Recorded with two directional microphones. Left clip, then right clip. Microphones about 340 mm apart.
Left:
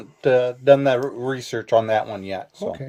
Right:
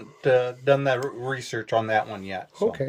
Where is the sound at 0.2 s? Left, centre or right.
Left.